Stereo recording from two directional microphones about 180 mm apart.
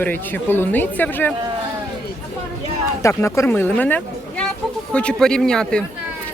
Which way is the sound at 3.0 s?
15° left (ahead or behind).